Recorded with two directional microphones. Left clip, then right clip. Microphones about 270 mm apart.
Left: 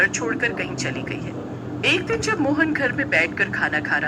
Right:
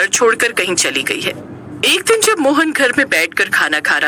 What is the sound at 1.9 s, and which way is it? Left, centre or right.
Speech, right.